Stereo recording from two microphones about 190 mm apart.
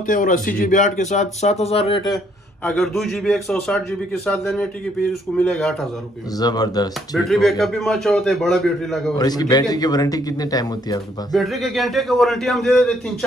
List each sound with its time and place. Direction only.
0.0 s speech: 45° left (ahead or behind)
2.6 s a man's voice: 5° left (ahead or behind)
6.4 s a man's voice: 20° left (ahead or behind)
7.2 s a man's voice: centre (ahead or behind)
9.2 s a man's voice: 20° left (ahead or behind)
11.3 s a man's voice: centre (ahead or behind)